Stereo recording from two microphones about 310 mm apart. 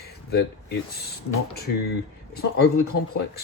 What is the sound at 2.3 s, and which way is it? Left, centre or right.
Speech, left.